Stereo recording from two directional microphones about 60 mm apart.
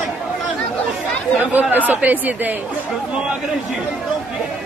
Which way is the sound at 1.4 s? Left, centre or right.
Right.